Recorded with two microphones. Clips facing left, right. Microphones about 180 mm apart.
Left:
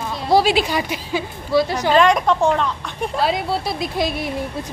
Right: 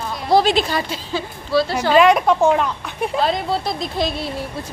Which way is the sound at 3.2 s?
10° left (ahead or behind).